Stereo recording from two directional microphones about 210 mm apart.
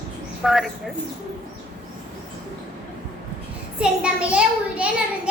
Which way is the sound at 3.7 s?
5° right (ahead or behind).